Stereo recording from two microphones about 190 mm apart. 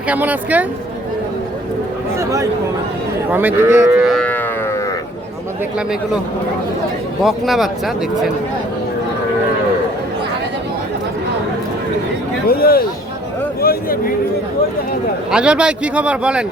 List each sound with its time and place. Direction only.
0.1 s speech: 10° right (ahead or behind)
2.1 s speech: 15° right (ahead or behind)
4.0 s a sound: 5° left (ahead or behind)
7.2 s speech: centre (ahead or behind)
12.5 s speech: 50° left (ahead or behind)
15.3 s speech: 5° right (ahead or behind)